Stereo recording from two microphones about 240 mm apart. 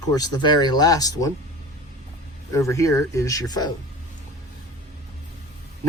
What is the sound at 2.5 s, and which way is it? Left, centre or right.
Speech, centre.